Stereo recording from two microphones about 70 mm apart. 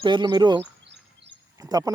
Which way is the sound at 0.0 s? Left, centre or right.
Right.